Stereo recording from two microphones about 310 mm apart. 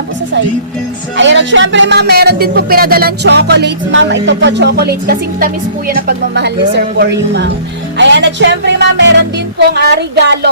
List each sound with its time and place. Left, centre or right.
1.1 s speech: right